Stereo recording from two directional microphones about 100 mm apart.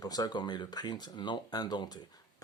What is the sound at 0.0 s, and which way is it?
Speech, 40° left (ahead or behind).